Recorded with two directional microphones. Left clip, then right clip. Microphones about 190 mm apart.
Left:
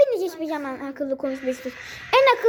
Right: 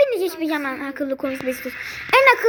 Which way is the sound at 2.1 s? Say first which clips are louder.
Right 3 dB; centre (ahead or behind).